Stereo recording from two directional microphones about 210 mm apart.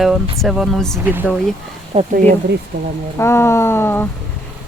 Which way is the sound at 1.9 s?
30° right (ahead or behind).